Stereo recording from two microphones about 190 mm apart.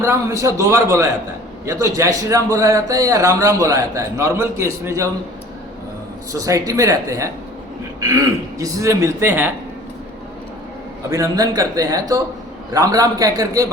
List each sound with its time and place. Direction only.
0.0 s a man's voice: 15° right (ahead or behind)
6.3 s a man's voice: 20° right (ahead or behind)
11.1 s a man's voice: 15° right (ahead or behind)